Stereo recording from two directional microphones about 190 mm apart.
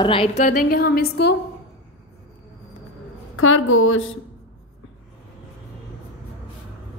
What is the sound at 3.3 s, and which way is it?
Speech, 90° left.